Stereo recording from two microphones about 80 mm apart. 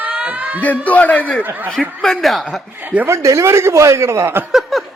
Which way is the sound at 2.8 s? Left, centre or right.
Centre.